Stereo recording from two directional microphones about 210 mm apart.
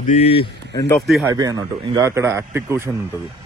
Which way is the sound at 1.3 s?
15° right (ahead or behind).